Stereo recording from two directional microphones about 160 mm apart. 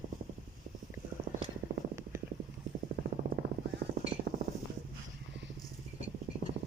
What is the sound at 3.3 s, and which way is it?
Vehicle, 80° right.